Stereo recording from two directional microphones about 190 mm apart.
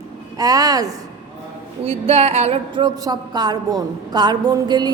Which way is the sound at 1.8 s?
30° right (ahead or behind).